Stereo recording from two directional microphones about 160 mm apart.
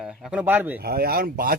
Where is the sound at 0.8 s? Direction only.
70° right (ahead or behind).